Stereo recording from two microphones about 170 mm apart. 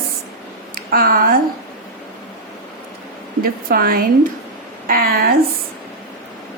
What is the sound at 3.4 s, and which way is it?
A woman's voice, 60° right (ahead or behind).